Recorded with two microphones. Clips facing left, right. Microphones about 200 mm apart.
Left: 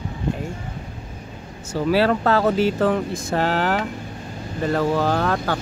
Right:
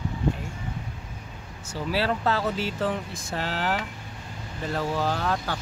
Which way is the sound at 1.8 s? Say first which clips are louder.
Left 7 dB; 55° left (ahead or behind).